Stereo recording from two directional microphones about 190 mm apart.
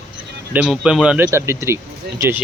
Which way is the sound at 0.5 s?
5° right (ahead or behind).